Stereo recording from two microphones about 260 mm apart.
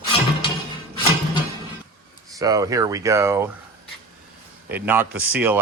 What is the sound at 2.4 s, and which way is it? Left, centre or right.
Speech, centre.